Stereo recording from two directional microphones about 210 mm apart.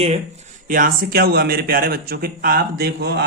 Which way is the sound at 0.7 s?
40° right (ahead or behind).